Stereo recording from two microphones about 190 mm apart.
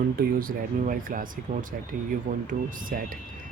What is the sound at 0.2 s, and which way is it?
Speech, 50° right (ahead or behind).